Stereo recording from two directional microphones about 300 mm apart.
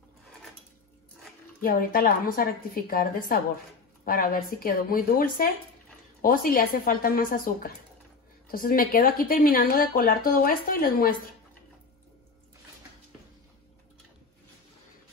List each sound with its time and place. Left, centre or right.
1.6 s speech: left